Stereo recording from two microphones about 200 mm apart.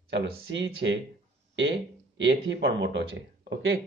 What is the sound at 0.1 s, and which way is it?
A man's voice, 65° right (ahead or behind).